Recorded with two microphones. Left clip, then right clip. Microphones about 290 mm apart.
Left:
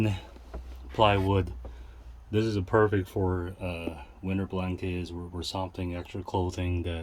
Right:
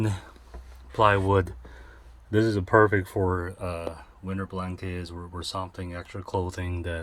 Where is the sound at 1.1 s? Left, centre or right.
Right.